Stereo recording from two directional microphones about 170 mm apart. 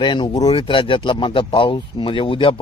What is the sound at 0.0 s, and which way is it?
A man's voice, 30° left (ahead or behind).